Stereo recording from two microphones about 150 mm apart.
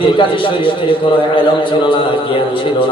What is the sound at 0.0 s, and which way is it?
A man's voice, 35° left (ahead or behind).